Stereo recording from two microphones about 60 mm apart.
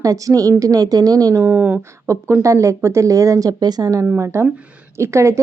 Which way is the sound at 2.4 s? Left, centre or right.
Right.